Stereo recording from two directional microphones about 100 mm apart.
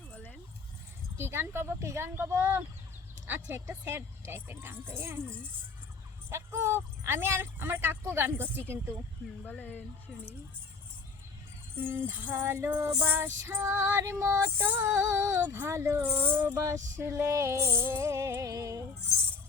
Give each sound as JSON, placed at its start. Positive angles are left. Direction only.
{"t": 1.1, "sound": "speech", "side_deg": -25}
{"t": 9.5, "sound": "speech", "side_deg": 20}
{"t": 11.8, "sound": "speech", "side_deg": -20}
{"t": 12.3, "sound": "speech", "side_deg": -30}